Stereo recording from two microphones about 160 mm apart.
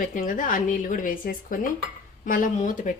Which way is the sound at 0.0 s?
55° left (ahead or behind).